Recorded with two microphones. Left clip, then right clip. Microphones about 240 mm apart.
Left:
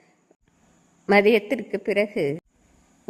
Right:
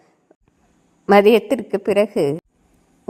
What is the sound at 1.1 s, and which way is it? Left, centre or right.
A woman's voice, centre.